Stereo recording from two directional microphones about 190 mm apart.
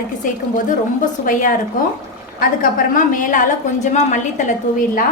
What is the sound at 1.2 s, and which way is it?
A woman's voice, 45° left (ahead or behind).